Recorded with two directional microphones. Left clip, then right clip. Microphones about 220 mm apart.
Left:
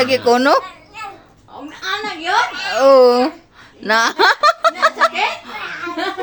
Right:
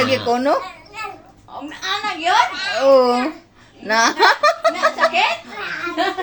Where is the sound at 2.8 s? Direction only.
35° left (ahead or behind).